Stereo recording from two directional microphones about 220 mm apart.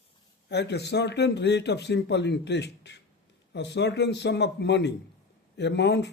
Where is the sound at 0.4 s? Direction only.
50° left (ahead or behind).